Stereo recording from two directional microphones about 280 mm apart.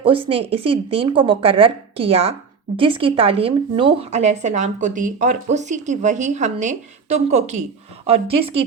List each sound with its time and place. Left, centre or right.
0.0 s speech: centre